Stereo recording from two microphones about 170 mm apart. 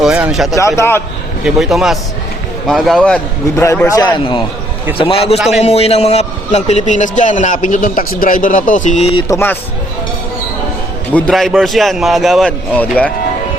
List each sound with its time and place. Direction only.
0.0 s speech: 5° right (ahead or behind)
0.5 s a man's voice: 15° left (ahead or behind)
1.5 s a man's voice: centre (ahead or behind)
3.5 s a man's voice: 15° left (ahead or behind); by 9.2 s 40° left (ahead or behind)
9.3 s a man's voice: 10° left (ahead or behind)
11.1 s a man's voice: centre (ahead or behind)